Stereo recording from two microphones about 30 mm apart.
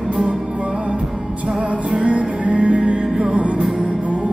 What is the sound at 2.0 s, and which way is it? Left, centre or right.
Music, right.